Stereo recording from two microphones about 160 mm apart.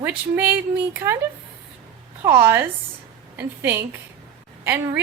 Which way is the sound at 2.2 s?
15° right (ahead or behind).